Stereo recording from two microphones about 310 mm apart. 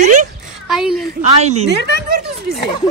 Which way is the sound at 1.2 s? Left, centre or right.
Right.